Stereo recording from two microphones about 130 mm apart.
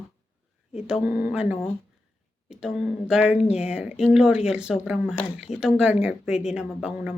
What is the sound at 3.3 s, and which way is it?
Speech, 55° left (ahead or behind).